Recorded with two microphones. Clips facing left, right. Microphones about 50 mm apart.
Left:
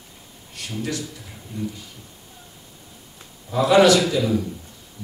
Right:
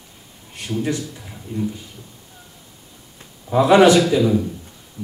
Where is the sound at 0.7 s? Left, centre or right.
Right.